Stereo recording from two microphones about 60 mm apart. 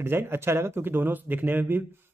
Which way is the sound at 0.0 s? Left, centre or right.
Right.